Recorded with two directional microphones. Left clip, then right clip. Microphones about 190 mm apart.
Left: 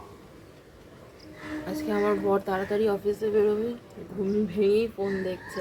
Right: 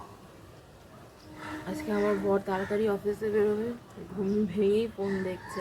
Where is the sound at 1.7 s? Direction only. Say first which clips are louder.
Left 3 dB; 5° left (ahead or behind).